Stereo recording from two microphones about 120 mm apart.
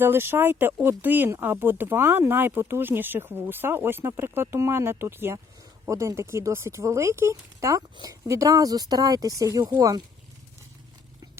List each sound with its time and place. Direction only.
0.0 s speech: 20° right (ahead or behind)